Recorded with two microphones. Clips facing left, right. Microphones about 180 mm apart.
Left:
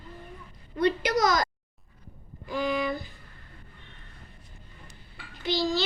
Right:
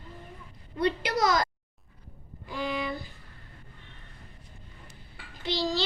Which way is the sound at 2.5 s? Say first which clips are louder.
Left 4 dB; 30° right (ahead or behind).